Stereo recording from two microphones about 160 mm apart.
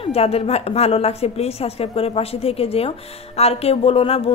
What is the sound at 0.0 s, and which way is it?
Speech, 40° left (ahead or behind).